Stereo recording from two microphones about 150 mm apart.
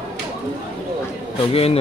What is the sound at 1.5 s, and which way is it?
Speech, 40° left (ahead or behind).